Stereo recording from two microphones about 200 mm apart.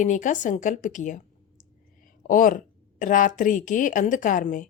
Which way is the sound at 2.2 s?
40° left (ahead or behind).